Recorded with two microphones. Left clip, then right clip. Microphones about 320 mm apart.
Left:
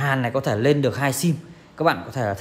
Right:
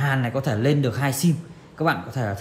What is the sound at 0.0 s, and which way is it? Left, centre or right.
A man's voice, left.